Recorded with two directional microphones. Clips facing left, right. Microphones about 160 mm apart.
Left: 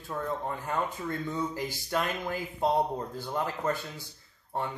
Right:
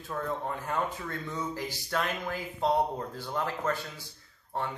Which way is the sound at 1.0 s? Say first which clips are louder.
Left 3 dB; 15° left (ahead or behind).